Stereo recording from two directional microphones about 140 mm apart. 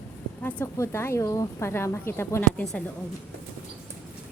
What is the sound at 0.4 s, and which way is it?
Speech, 20° left (ahead or behind).